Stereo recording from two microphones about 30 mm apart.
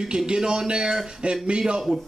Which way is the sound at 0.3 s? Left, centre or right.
Right.